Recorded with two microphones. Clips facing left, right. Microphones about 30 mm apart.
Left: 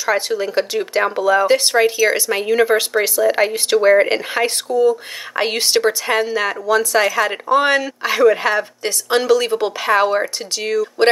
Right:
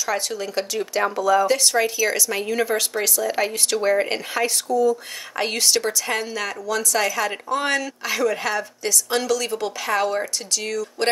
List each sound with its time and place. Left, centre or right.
0.0 s speech: left